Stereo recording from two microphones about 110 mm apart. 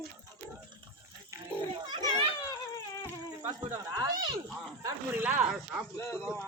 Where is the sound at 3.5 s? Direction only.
40° right (ahead or behind).